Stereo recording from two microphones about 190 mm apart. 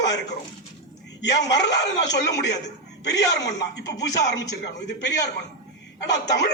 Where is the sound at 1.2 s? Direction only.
65° left (ahead or behind).